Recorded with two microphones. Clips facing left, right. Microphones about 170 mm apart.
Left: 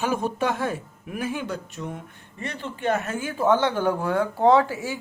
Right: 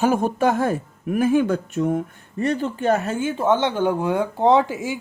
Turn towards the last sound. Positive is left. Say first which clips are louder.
# right 2 dB
turn(degrees=-20)  # may be behind; listen again after turning